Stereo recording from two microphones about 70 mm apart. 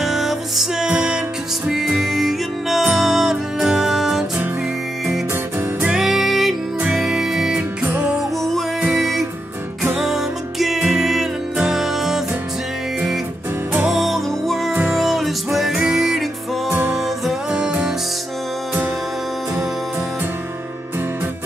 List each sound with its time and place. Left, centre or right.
0.0 s music: centre
5.8 s music: centre
6.0 s music: centre
7.8 s music: centre
8.9 s music: centre
13.8 s music: centre
17.3 s music: centre